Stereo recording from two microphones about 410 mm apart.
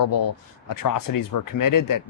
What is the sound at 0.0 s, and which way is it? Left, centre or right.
Speech, left.